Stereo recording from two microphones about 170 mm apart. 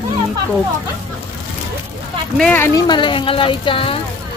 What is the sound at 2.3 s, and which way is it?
Speech, 10° left (ahead or behind).